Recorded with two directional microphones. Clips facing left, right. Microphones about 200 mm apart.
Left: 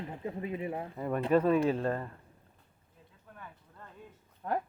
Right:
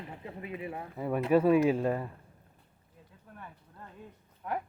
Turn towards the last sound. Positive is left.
turn(degrees=35)  # may be behind; listen again after turning